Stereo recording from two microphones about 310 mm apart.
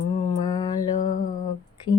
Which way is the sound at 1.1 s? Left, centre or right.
Left.